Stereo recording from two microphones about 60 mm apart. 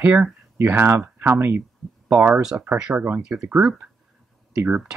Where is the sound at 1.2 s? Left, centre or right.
Right.